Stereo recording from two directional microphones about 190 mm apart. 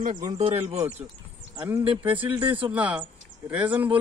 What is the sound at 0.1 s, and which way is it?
Speech, 20° right (ahead or behind).